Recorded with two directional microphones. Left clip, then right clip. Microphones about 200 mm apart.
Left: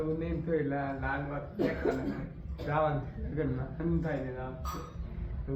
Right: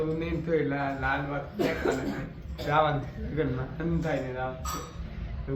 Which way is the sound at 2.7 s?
20° right (ahead or behind).